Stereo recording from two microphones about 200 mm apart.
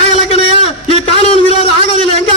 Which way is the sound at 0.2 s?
35° left (ahead or behind).